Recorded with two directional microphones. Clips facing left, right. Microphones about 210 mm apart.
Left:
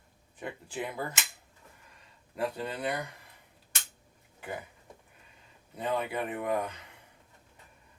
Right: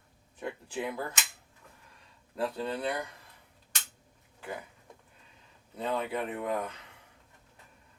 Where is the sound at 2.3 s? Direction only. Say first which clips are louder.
Right 1 dB; 15° left (ahead or behind).